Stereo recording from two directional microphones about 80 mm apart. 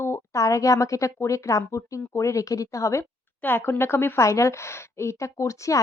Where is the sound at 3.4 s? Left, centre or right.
Left.